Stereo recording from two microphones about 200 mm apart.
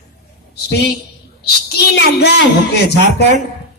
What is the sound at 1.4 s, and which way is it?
A man's voice, 55° left (ahead or behind).